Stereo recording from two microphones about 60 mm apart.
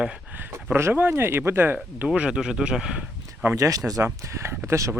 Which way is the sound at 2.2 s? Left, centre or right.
Centre.